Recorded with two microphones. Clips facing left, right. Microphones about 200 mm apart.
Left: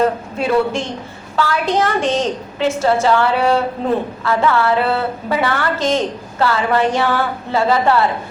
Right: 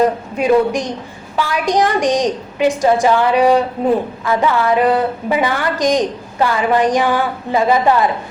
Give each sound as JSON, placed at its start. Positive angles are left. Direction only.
{"t": 0.0, "sound": "a woman's voice", "side_deg": -15}